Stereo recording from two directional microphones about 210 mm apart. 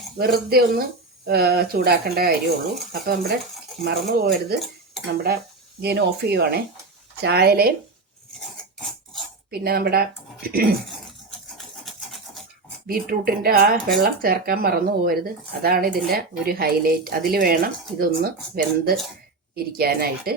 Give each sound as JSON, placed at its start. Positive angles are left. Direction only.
{"t": 0.2, "sound": "speech", "side_deg": -45}
{"t": 5.8, "sound": "speech", "side_deg": -50}
{"t": 9.5, "sound": "speech", "side_deg": -45}
{"t": 11.5, "sound": "a sound", "side_deg": 0}
{"t": 12.9, "sound": "speech", "side_deg": -45}